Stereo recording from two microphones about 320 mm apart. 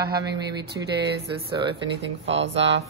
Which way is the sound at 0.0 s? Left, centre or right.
Right.